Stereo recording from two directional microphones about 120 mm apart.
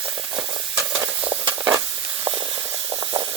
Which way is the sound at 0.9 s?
10° right (ahead or behind).